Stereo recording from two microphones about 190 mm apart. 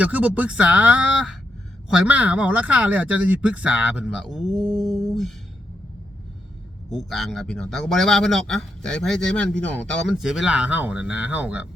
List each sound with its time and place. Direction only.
0.0 s speech: 10° right (ahead or behind)
4.6 s mantra: 20° right (ahead or behind)
4.9 s humming: centre (ahead or behind)
6.9 s speech: centre (ahead or behind)